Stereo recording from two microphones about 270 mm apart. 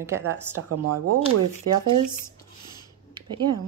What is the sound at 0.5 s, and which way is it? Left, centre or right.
Speech, right.